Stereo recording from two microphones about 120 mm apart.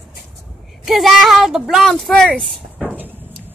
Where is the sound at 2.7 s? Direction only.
15° right (ahead or behind).